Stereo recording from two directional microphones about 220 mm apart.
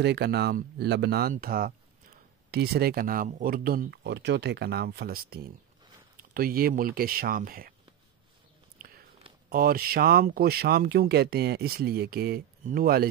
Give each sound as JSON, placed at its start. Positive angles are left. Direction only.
{"t": 0.0, "sound": "speech", "side_deg": -50}
{"t": 8.7, "sound": "a sound", "side_deg": -40}
{"t": 9.5, "sound": "speech", "side_deg": -40}